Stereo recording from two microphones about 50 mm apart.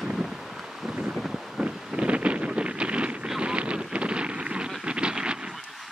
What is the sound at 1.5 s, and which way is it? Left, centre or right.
Wind noise, centre.